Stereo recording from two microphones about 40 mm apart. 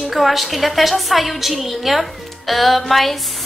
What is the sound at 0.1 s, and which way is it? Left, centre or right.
A woman's voice, centre.